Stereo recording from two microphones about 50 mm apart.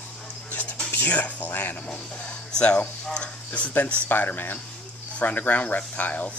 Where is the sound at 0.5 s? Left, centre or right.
Left.